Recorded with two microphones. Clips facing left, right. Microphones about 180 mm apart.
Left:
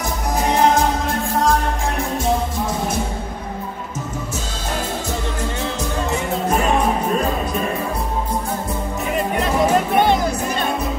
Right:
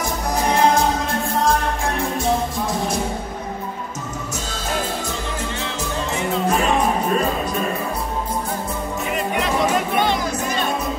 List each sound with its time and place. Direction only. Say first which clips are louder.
9.9 s music: left 4 dB; 55° left (ahead or behind)